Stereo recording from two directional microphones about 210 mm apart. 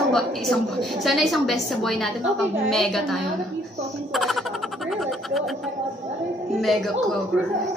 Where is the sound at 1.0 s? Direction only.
Centre (ahead or behind).